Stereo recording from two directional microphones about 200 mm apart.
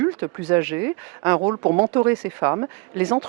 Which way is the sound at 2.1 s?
15° right (ahead or behind).